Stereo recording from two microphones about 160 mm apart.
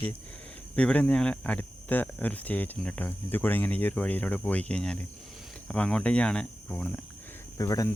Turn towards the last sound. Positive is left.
turn(degrees=20)  # may be behind; listen again after turning